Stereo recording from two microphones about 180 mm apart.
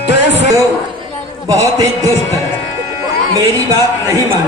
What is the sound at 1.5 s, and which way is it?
Speech, 20° right (ahead or behind).